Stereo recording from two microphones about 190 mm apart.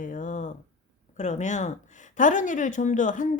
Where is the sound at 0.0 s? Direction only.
40° left (ahead or behind).